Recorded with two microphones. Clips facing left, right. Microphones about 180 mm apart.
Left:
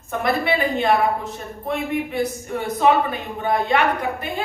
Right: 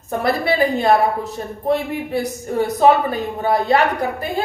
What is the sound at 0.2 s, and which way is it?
Speech, 40° right (ahead or behind).